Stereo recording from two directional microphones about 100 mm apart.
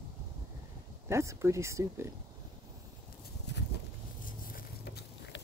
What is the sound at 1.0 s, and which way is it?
Speech, 30° right (ahead or behind).